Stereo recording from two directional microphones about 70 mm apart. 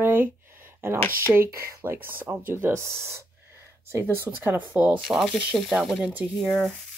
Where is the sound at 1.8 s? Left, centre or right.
Right.